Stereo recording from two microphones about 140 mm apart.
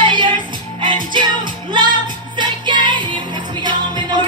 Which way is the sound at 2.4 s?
35° right (ahead or behind).